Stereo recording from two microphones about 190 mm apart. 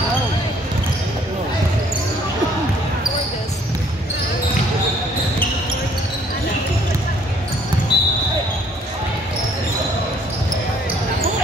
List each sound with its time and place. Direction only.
7.9 s basketball bounce: 60° left (ahead or behind)